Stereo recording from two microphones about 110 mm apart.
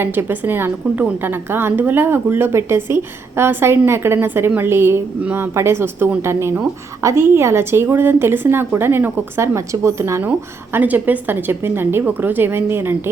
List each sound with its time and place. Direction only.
0.0 s a woman's voice: 20° right (ahead or behind)